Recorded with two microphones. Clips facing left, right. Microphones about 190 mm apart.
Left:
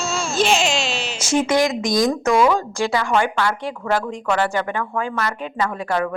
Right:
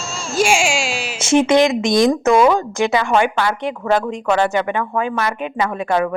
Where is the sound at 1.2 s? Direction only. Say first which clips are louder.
Right 5 dB; 25° right (ahead or behind).